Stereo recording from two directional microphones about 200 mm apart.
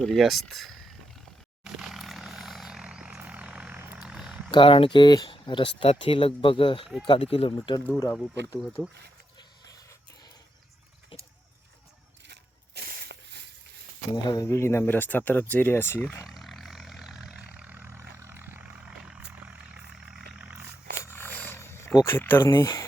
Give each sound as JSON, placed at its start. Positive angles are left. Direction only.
{"t": 0.0, "sound": "speech", "side_deg": 0}
{"t": 1.6, "sound": "vehicle", "side_deg": 0}
{"t": 4.5, "sound": "speech", "side_deg": 25}
{"t": 6.8, "sound": "speech", "side_deg": 0}
{"t": 7.1, "sound": "speech", "side_deg": 30}
{"t": 7.9, "sound": "speech", "side_deg": 10}
{"t": 12.3, "sound": "a sound", "side_deg": -55}
{"t": 14.3, "sound": "speech", "side_deg": 15}
{"t": 16.2, "sound": "vehicle", "side_deg": 0}
{"t": 20.4, "sound": "a sound", "side_deg": -10}
{"t": 21.0, "sound": "wild animals", "side_deg": 10}
{"t": 22.0, "sound": "speech", "side_deg": 10}